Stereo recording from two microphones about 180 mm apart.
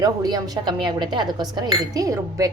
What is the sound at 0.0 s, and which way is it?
Speech, 20° right (ahead or behind).